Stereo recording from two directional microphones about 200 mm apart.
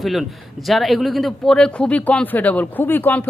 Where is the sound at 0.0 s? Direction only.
Centre (ahead or behind).